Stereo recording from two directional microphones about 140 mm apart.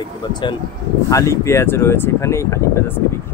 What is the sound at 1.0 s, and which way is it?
Speech, 20° left (ahead or behind).